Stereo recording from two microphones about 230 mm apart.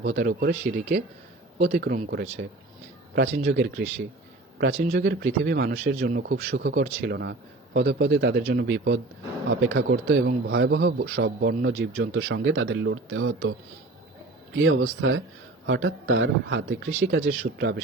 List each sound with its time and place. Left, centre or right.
0.0 s a man's voice: right
3.3 s a man's voice: right
14.5 s a man's voice: right